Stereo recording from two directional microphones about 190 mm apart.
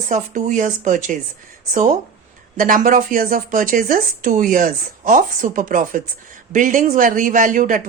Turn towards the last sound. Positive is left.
turn(degrees=-45)  # may be behind; listen again after turning